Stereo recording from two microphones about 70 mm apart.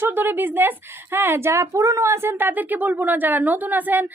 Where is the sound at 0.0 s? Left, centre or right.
Right.